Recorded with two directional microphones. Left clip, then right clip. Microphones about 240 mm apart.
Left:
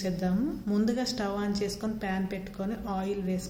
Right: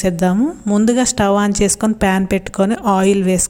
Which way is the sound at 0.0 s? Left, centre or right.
Right.